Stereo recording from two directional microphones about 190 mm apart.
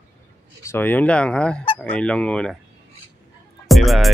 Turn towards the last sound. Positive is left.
turn(degrees=0)  # may be behind; listen again after turning